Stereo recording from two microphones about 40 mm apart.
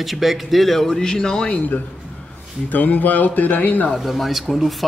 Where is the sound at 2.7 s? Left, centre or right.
Left.